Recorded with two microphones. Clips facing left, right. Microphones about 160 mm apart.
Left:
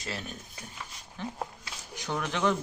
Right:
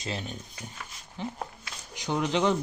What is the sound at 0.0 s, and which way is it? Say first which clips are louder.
A man's voice: right 3 dB; 20° right (ahead or behind).